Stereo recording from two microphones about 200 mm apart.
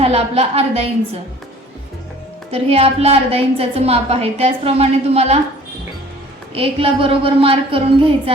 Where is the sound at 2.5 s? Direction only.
30° right (ahead or behind).